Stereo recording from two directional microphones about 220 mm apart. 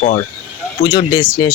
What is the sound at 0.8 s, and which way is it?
Speech, 20° left (ahead or behind).